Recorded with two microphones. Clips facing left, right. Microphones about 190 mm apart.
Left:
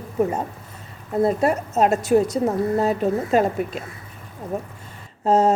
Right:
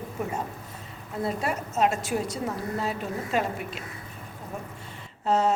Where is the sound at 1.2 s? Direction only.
45° left (ahead or behind).